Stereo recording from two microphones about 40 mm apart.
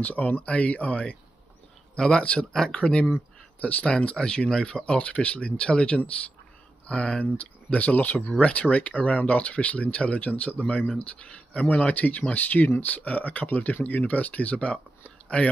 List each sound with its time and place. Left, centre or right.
0.0 s speech: left
2.0 s speech: left
3.1 s speech: left
4.2 s speech: left
5.0 s speech: left
7.2 s speech: left
8.3 s speech: left
11.1 s speech: left
11.6 s speech: left
12.4 s speech: left